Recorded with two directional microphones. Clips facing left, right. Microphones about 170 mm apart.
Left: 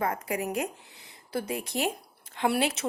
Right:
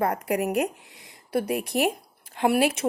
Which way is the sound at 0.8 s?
65° right (ahead or behind).